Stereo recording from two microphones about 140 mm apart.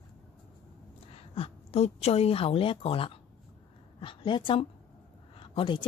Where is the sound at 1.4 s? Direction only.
50° left (ahead or behind).